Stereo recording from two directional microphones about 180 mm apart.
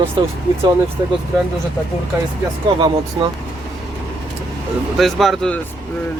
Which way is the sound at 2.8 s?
25° right (ahead or behind).